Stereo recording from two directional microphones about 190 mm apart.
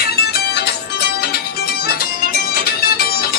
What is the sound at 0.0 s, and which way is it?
Music, 55° left (ahead or behind).